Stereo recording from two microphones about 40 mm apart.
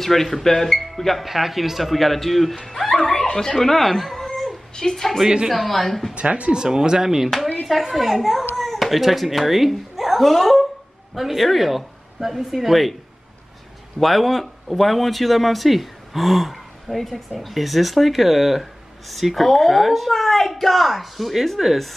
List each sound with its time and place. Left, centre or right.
0.0 s speech: centre
1.2 s speech: centre
4.3 s cat: centre
5.5 s speech: centre
6.1 s speech: right
6.5 s speech: centre
13.9 s speech: centre